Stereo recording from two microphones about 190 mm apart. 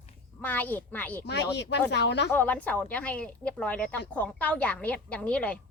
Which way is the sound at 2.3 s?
10° left (ahead or behind).